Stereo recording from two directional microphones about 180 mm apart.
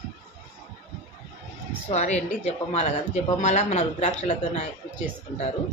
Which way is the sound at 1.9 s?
40° left (ahead or behind).